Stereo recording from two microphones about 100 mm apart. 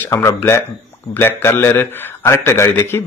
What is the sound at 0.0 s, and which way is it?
A man's voice, 25° left (ahead or behind).